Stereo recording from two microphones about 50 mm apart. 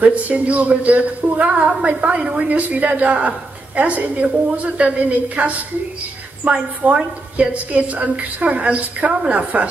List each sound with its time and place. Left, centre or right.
0.0 s a woman's voice: right